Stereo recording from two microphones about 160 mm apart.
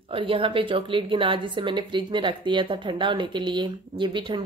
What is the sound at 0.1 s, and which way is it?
A woman's voice, 35° right (ahead or behind).